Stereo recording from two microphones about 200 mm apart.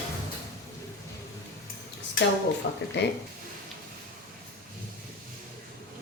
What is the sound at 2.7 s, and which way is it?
Speech, 55° left (ahead or behind).